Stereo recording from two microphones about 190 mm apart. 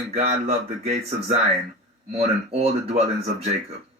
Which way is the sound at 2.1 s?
35° right (ahead or behind).